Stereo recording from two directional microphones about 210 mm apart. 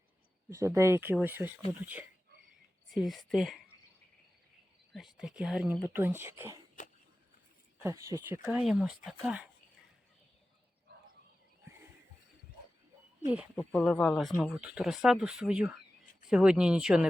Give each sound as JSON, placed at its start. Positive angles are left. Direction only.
{"t": 0.5, "sound": "speech", "side_deg": -15}
{"t": 4.9, "sound": "speech", "side_deg": 0}
{"t": 6.8, "sound": "a sound", "side_deg": 35}
{"t": 7.8, "sound": "speech", "side_deg": -15}
{"t": 13.6, "sound": "speech", "side_deg": 0}